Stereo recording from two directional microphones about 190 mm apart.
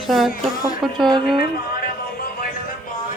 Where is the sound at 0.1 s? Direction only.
Centre (ahead or behind).